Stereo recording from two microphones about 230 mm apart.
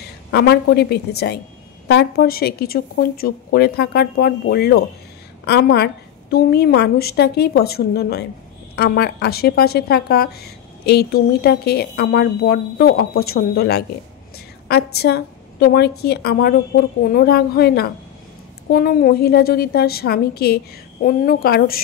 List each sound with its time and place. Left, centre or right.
0.3 s a woman's voice: left